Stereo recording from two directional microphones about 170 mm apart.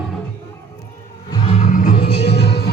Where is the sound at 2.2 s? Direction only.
75° left (ahead or behind).